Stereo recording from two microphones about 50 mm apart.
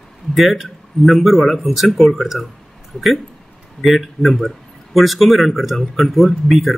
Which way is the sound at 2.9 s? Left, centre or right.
Left.